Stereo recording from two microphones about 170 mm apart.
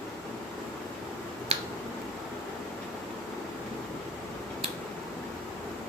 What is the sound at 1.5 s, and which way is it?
Finger snapping, 35° right (ahead or behind).